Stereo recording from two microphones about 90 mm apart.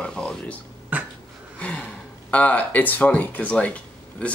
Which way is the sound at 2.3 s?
15° left (ahead or behind).